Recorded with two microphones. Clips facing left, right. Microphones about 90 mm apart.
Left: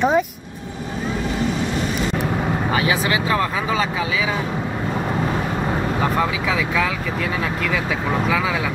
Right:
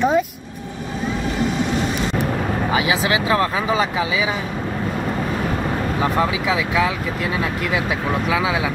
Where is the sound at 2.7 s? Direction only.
10° right (ahead or behind).